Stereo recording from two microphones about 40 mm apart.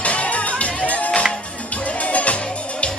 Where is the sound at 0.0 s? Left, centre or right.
Left.